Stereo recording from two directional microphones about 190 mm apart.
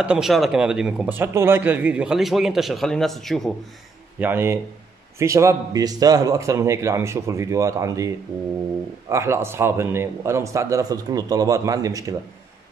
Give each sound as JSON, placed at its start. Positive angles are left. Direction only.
{"t": 0.0, "sound": "speech", "side_deg": -5}
{"t": 4.2, "sound": "a man's voice", "side_deg": -10}
{"t": 9.1, "sound": "a man's voice", "side_deg": -15}